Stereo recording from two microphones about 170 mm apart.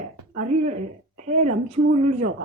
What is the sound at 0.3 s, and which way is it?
Speech, 45° right (ahead or behind).